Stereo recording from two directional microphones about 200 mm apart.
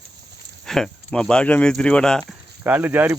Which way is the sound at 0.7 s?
Centre (ahead or behind).